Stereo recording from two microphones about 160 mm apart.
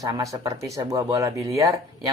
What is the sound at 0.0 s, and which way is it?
Speech, 20° right (ahead or behind).